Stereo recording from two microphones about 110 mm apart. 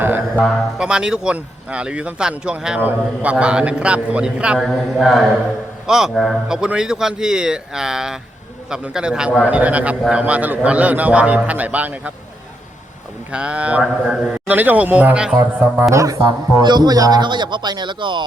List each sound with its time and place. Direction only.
0.0 s a sound: 20° right (ahead or behind)
0.4 s a man's voice: 5° right (ahead or behind)
13.3 s speech: 10° right (ahead or behind)
15.8 s a man's voice: 30° right (ahead or behind); by 18.3 s 45° right (ahead or behind)